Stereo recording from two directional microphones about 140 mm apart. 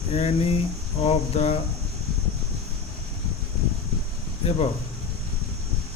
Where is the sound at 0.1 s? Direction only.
45° left (ahead or behind).